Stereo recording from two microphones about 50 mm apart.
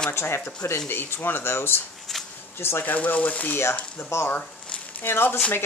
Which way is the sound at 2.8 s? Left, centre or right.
Left.